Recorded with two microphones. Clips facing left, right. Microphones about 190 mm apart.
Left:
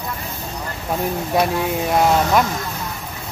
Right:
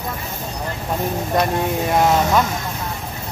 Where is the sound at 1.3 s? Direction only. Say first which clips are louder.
Even; 5° left (ahead or behind).